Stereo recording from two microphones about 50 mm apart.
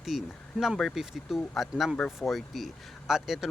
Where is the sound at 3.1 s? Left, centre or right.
Centre.